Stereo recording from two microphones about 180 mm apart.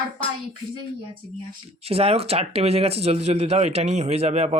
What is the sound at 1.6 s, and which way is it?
Speech, 35° right (ahead or behind).